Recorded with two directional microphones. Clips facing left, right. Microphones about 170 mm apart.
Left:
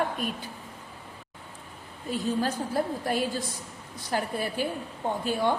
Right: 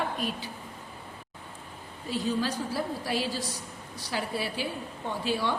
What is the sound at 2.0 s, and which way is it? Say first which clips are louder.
A woman's voice: left 1 dB; 50° left (ahead or behind).